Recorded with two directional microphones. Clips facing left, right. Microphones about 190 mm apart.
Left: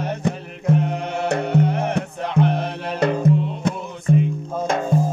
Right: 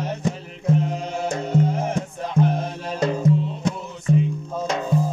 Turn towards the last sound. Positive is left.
turn(degrees=50)  # may be behind; listen again after turning